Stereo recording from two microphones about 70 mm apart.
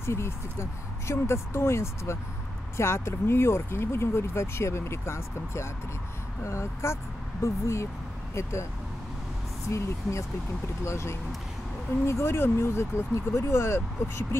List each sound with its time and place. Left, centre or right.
0.0 s speech: left
9.7 s speech: left